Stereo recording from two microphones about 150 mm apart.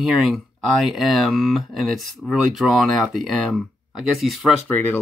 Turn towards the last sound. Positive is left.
turn(degrees=10)  # may be behind; listen again after turning